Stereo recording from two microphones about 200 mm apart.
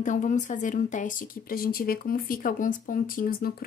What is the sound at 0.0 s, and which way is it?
Speech, 40° left (ahead or behind).